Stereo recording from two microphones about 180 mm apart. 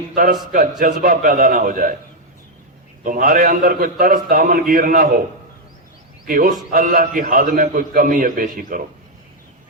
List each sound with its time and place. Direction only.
0.1 s a man's voice: 50° right (ahead or behind)
3.0 s a man's voice: 50° right (ahead or behind)
6.2 s a man's voice: 55° right (ahead or behind)